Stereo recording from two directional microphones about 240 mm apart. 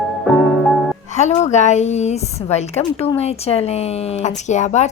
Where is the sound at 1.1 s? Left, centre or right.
Left.